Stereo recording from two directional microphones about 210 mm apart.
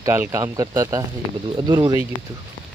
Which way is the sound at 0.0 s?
15° right (ahead or behind).